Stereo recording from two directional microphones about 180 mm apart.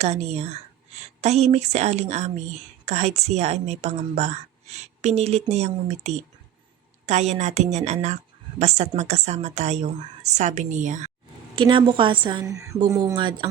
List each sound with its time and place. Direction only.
0.0 s a woman's voice: 35° right (ahead or behind)
11.5 s a woman's voice: 30° right (ahead or behind)